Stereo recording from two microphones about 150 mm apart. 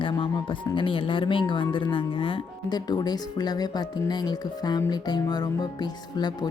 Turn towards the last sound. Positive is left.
turn(degrees=30)  # may be behind; listen again after turning